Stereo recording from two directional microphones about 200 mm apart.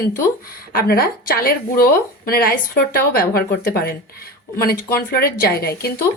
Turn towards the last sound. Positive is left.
turn(degrees=50)  # may be behind; listen again after turning